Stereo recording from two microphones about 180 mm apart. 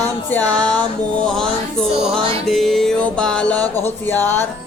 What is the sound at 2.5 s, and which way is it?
Music, centre (ahead or behind).